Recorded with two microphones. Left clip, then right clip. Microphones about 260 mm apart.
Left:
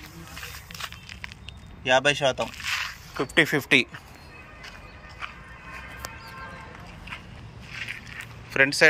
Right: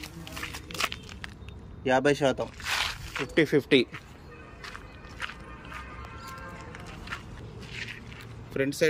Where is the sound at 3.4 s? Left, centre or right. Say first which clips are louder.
Left 3 dB; centre.